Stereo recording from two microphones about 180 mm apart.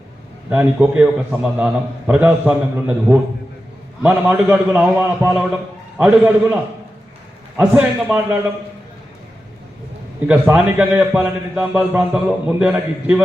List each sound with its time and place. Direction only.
0.5 s a man's voice: 10° right (ahead or behind)
7.6 s a man's voice: 10° right (ahead or behind)
10.2 s a man's voice: 10° right (ahead or behind)